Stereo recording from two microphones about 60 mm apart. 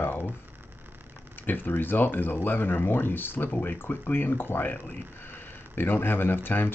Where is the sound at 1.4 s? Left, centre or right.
Left.